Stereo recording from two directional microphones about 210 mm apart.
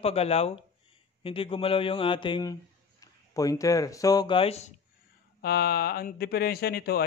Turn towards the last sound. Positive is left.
turn(degrees=45)  # may be behind; listen again after turning